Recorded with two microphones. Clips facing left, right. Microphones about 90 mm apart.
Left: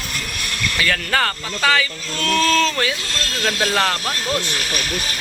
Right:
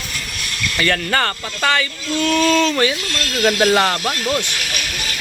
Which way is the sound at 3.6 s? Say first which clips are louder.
Right 3 dB; 5° right (ahead or behind).